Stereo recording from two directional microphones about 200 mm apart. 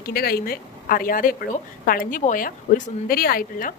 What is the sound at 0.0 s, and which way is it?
Speech, 50° left (ahead or behind).